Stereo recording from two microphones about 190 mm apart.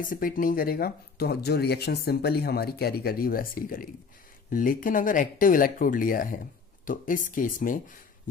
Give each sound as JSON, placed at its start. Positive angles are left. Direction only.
{"t": 0.0, "sound": "speech", "side_deg": 45}